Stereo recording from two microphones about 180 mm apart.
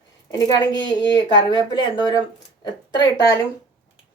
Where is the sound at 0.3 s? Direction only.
20° left (ahead or behind).